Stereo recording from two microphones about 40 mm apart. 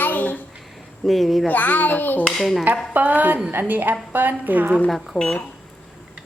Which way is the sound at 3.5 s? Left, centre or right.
Right.